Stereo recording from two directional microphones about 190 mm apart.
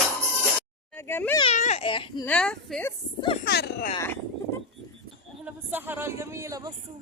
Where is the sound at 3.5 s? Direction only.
60° left (ahead or behind).